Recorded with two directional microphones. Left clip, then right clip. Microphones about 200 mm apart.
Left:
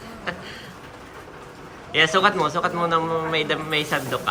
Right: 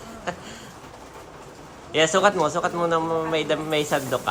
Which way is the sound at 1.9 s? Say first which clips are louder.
Left 1 dB; 20° right (ahead or behind).